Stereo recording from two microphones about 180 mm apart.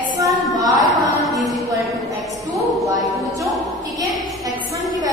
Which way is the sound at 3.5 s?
Centre (ahead or behind).